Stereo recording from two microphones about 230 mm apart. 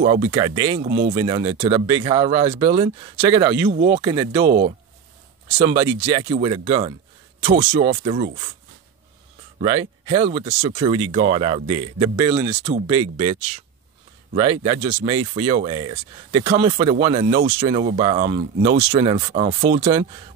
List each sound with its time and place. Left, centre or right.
0.0 s speech: right
0.8 s speech: right
1.1 s speech: right
9.6 s speech: right